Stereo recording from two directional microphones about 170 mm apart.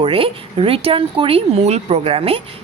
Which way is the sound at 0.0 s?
30° right (ahead or behind).